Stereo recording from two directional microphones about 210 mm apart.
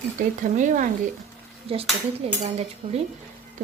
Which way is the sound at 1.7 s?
30° right (ahead or behind).